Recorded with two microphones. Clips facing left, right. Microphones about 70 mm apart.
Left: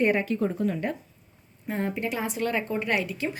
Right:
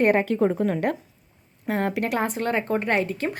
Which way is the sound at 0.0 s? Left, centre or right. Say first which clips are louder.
Right 4 dB; right.